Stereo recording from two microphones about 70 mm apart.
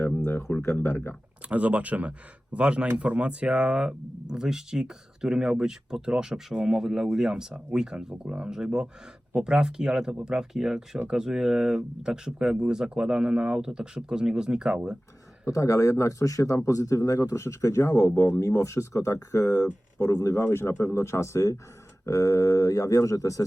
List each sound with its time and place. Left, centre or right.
0.0 s a sound: left
0.6 s speech: left
1.5 s speech: centre
15.4 s speech: left
20.3 s speech: left